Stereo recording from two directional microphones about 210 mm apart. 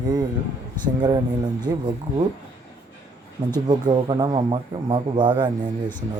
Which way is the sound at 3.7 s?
20° right (ahead or behind).